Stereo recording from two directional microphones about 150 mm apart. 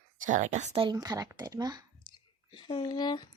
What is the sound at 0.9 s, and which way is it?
Speech, 25° right (ahead or behind).